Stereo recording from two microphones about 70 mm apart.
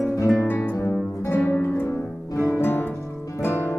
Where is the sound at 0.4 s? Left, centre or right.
Left.